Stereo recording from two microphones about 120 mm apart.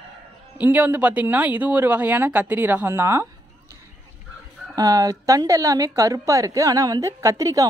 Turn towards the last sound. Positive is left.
turn(degrees=-25)  # may be behind; listen again after turning